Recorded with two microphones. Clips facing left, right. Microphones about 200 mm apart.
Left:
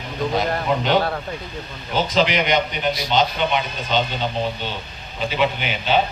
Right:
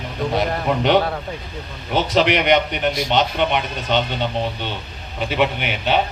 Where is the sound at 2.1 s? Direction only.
65° right (ahead or behind).